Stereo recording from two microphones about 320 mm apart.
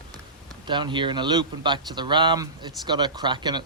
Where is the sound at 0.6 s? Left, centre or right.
Centre.